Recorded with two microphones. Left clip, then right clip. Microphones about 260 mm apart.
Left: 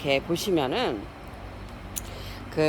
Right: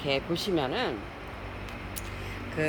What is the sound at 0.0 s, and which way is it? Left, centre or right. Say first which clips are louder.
Speech: left 4 dB; centre.